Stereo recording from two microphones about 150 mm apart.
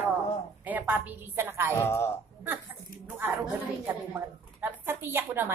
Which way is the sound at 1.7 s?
15° left (ahead or behind).